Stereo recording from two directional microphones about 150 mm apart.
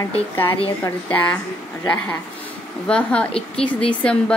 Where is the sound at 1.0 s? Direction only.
10° left (ahead or behind).